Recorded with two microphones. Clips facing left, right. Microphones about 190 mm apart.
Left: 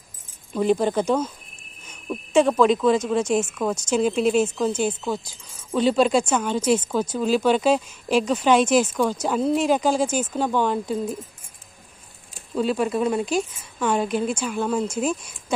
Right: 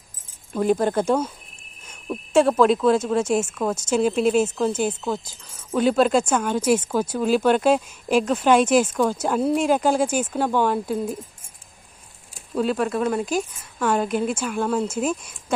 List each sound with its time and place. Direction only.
0.5 s speech: 5° right (ahead or behind)
12.5 s speech: centre (ahead or behind)